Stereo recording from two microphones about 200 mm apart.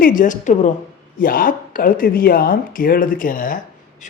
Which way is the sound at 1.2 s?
45° left (ahead or behind).